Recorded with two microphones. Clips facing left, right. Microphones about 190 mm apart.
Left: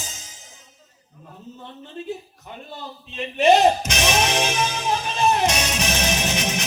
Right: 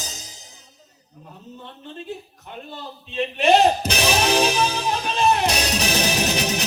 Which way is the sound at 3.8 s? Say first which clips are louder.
Right 1 dB; 35° right (ahead or behind).